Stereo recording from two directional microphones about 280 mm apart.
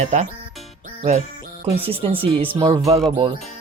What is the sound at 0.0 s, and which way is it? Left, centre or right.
Speech, right.